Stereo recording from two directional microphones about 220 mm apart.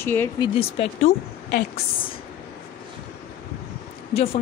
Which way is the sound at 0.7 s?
25° left (ahead or behind).